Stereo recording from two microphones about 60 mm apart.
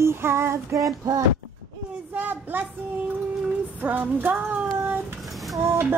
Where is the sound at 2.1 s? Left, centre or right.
Right.